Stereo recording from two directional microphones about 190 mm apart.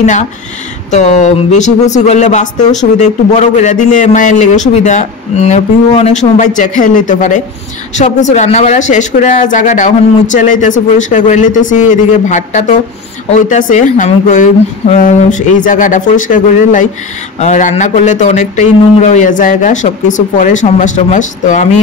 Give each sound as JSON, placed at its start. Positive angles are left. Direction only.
{"t": 0.0, "sound": "speech", "side_deg": 40}